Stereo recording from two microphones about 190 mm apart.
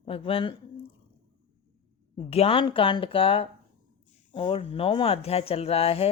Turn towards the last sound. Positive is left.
turn(degrees=30)  # may be behind; listen again after turning